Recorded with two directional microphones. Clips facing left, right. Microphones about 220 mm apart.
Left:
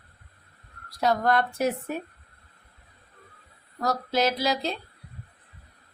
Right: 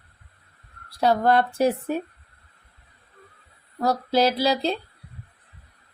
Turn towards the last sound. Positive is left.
turn(degrees=-30)  # may be behind; listen again after turning